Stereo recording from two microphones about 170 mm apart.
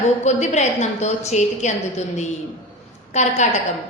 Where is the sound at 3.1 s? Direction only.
45° left (ahead or behind).